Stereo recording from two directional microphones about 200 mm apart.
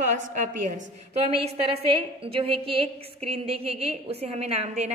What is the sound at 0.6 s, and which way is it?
Speech, 40° right (ahead or behind).